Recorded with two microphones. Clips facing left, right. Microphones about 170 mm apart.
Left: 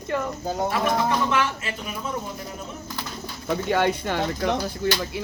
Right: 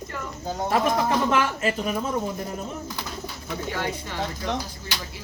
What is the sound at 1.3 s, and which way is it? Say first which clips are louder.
Speech: right 2 dB; 45° right (ahead or behind).